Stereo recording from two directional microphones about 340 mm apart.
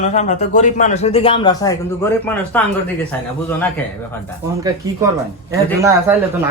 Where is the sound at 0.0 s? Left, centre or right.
Left; by 3.7 s centre.